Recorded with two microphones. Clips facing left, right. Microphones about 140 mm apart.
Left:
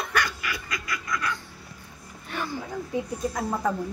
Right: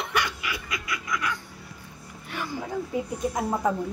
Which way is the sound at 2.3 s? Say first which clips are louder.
Left 2 dB; 15° right (ahead or behind).